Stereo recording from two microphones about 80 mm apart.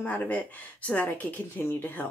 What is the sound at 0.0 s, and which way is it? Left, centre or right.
Speech, centre.